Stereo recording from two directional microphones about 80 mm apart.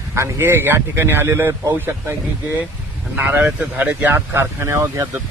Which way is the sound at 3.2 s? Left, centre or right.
Right.